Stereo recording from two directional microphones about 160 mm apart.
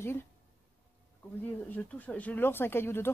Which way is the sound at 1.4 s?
10° left (ahead or behind).